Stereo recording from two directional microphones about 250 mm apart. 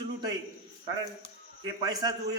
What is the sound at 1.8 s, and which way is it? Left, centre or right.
Speech, centre.